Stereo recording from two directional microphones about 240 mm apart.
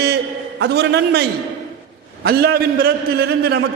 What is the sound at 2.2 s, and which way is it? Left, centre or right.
A man's voice, right.